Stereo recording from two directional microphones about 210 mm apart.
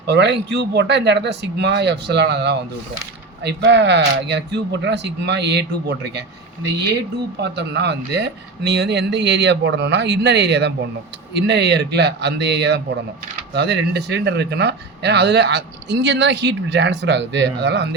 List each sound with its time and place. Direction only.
0.0 s speech: 55° right (ahead or behind)
7.4 s speech: 55° right (ahead or behind)